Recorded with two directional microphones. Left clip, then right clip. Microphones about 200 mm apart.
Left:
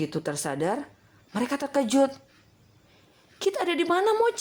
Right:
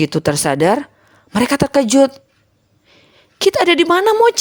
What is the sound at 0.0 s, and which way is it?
A woman's voice, 40° right (ahead or behind).